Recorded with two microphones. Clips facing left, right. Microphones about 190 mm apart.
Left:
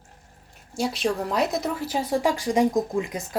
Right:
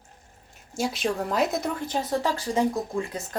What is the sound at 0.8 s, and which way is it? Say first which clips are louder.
A woman's voice: left 2 dB; centre (ahead or behind).